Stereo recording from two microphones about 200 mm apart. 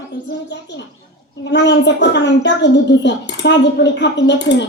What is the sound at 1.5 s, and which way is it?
A woman's voice, 60° left (ahead or behind).